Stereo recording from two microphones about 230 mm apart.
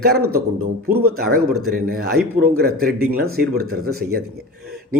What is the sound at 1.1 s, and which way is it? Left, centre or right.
Speech, right.